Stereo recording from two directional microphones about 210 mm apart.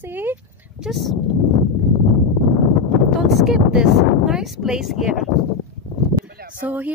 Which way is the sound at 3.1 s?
Centre (ahead or behind).